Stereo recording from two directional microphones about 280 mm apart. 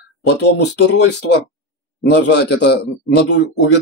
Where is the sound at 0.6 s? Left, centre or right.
Left.